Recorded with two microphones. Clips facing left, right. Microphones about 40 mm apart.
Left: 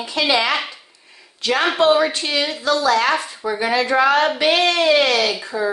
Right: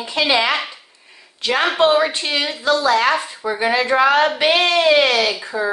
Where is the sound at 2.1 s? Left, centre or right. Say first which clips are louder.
Even; right.